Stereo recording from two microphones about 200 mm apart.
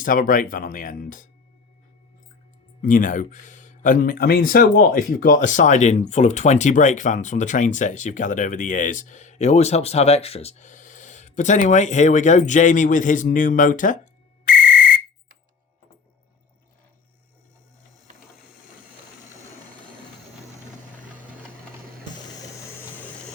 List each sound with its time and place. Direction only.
0.0 s speech: 40° left (ahead or behind)
2.8 s speech: 40° left (ahead or behind)